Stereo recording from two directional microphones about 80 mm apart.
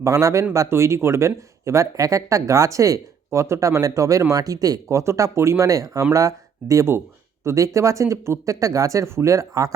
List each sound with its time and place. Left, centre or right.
0.0 s speech: right